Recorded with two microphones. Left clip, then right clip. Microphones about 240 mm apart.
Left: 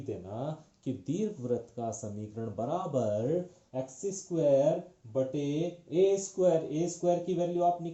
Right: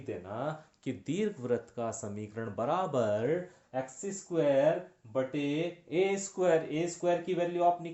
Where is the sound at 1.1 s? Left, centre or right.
Right.